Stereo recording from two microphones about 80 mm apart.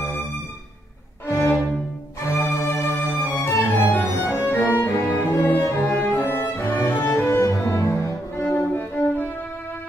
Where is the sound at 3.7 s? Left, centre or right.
Left.